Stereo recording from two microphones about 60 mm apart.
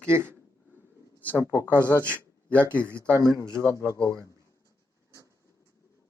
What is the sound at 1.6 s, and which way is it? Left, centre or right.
Speech, right.